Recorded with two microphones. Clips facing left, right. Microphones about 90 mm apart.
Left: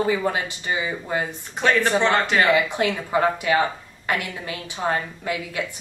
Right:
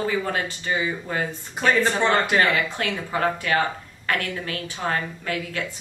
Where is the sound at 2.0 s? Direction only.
5° right (ahead or behind).